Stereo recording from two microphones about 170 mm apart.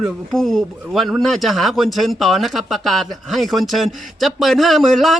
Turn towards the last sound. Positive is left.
turn(degrees=0)  # may be behind; listen again after turning